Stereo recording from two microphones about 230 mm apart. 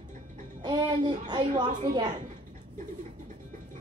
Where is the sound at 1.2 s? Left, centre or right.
Centre.